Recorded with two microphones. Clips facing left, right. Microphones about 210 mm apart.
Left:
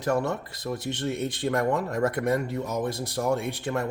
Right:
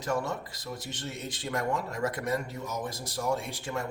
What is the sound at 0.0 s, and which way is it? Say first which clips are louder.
Speech: left 5 dB; 60° left (ahead or behind).